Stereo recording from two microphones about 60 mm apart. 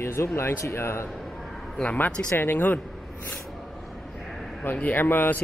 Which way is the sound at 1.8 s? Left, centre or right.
Left.